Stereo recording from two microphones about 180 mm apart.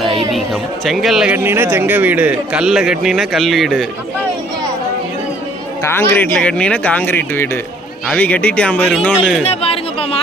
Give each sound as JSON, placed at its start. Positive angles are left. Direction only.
{"t": 0.3, "sound": "speech", "side_deg": 0}
{"t": 5.8, "sound": "speech", "side_deg": 15}
{"t": 9.4, "sound": "chatter", "side_deg": 35}